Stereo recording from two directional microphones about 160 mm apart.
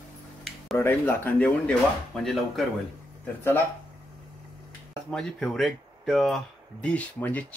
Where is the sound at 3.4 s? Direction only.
15° left (ahead or behind).